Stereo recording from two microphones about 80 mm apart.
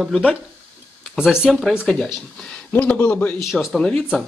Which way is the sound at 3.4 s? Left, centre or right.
Centre.